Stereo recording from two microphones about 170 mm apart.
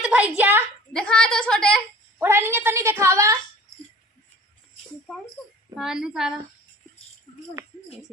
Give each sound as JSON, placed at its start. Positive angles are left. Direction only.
{"t": 0.0, "sound": "a woman's voice", "side_deg": -5}
{"t": 0.9, "sound": "a woman's voice", "side_deg": 5}
{"t": 2.2, "sound": "a woman's voice", "side_deg": -15}
{"t": 5.7, "sound": "a woman's voice", "side_deg": -5}
{"t": 7.6, "sound": "speech", "side_deg": -15}